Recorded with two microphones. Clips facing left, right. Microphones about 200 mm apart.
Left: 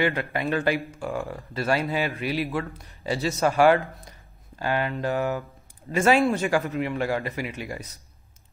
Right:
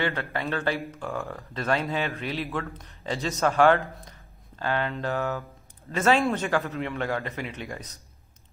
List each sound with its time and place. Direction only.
0.0 s speech: 15° left (ahead or behind)